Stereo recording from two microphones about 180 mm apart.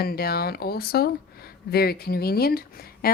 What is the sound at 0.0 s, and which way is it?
Speech, 60° left (ahead or behind).